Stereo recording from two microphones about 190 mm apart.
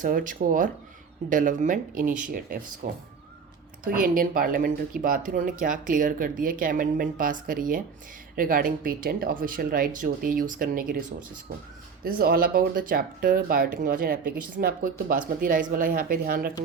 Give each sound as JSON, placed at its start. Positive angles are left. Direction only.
{"t": 0.0, "sound": "speech", "side_deg": -45}